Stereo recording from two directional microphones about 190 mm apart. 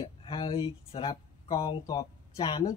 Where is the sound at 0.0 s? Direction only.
30° left (ahead or behind).